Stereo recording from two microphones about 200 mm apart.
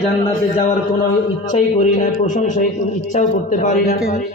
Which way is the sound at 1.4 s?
35° left (ahead or behind).